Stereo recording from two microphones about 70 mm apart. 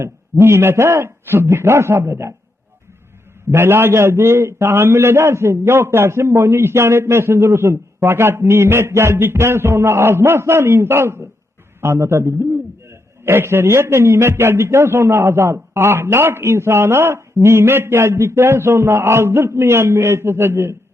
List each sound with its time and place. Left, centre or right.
0.0 s a man's voice: right
3.5 s a man's voice: right